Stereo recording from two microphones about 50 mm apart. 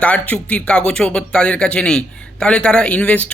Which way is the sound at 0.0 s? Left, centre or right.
Left.